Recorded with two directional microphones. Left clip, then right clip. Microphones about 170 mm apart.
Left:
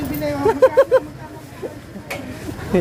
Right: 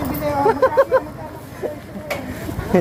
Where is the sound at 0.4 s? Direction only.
50° left (ahead or behind).